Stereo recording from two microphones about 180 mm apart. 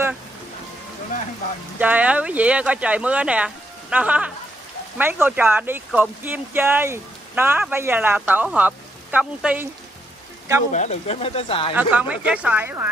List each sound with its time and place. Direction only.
1.8 s speech: 10° right (ahead or behind)
10.7 s speech: 40° left (ahead or behind)
11.7 s speech: 10° right (ahead or behind)